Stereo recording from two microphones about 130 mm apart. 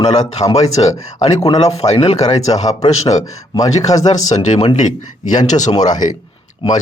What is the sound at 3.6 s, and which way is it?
Speech, 25° left (ahead or behind).